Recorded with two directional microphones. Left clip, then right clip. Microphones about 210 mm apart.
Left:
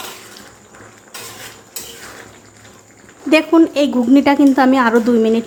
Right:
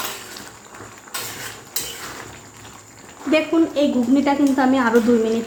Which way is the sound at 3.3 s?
30° left (ahead or behind).